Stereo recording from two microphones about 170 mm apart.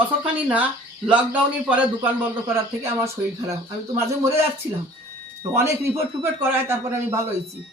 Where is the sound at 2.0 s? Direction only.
10° right (ahead or behind).